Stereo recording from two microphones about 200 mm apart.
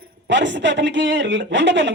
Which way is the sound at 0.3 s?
65° right (ahead or behind).